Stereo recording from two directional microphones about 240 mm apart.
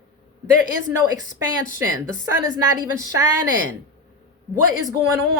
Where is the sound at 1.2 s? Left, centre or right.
Left.